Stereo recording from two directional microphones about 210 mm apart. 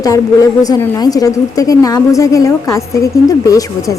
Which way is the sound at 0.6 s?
15° left (ahead or behind).